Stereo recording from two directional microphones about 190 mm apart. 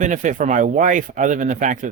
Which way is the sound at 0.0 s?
40° right (ahead or behind).